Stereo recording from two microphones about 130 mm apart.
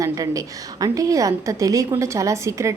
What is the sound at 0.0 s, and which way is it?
A woman's voice, 25° right (ahead or behind).